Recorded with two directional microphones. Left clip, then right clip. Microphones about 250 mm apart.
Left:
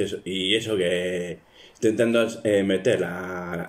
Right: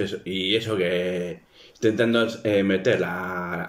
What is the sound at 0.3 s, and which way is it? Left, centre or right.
Speech, centre.